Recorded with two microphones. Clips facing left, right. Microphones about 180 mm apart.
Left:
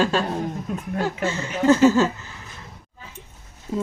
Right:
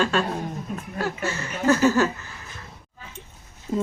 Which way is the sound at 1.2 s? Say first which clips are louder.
Left 4 dB; 25° left (ahead or behind).